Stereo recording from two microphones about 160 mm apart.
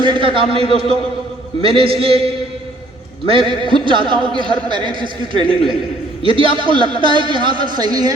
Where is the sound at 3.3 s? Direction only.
30° right (ahead or behind).